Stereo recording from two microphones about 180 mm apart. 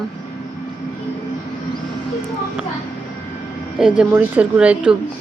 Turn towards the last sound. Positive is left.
turn(degrees=-5)  # may be behind; listen again after turning